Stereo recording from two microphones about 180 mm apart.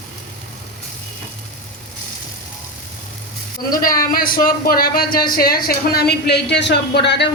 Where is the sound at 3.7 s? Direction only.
50° left (ahead or behind).